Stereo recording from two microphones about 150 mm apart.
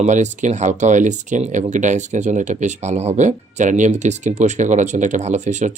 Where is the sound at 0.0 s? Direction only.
50° right (ahead or behind).